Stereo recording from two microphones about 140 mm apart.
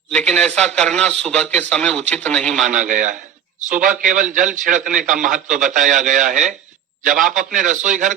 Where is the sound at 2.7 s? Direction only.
70° right (ahead or behind).